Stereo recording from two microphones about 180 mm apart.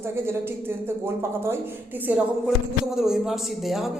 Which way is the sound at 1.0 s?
15° right (ahead or behind).